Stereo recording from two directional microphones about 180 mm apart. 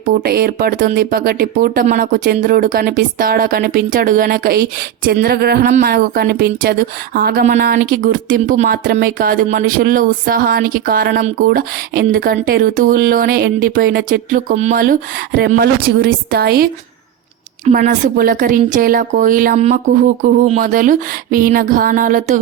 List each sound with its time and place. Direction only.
0.0 s speech: 50° right (ahead or behind)
17.7 s speech: 45° right (ahead or behind)